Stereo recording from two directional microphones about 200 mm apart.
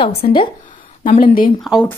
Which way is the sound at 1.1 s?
45° left (ahead or behind).